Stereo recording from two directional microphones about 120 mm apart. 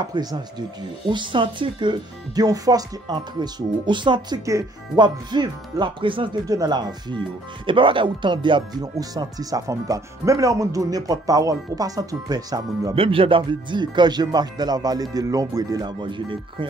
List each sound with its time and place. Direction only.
0.0 s speech: 35° right (ahead or behind)
4.5 s speech: 25° right (ahead or behind)
5.0 s speech: 40° right (ahead or behind)
6.4 s speech: 30° right (ahead or behind)
12.9 s speech: 50° right (ahead or behind)